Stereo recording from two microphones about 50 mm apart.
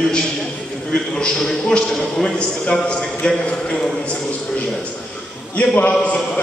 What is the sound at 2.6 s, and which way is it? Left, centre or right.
A man's voice, left.